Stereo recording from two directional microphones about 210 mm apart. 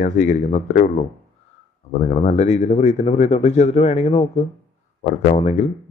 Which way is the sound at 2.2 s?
30° left (ahead or behind).